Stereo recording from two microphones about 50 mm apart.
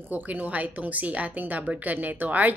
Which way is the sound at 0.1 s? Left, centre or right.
Right.